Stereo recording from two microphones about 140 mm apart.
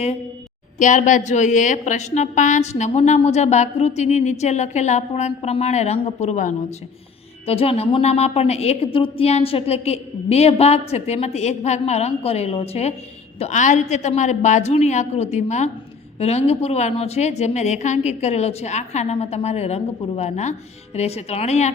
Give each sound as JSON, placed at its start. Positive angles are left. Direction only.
{"t": 0.8, "sound": "a woman's voice", "side_deg": 65}
{"t": 7.4, "sound": "a woman's voice", "side_deg": 45}
{"t": 13.4, "sound": "a woman's voice", "side_deg": 60}